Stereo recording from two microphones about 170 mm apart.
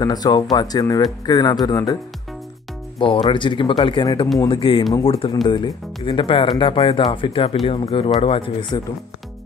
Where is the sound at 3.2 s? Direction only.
30° left (ahead or behind).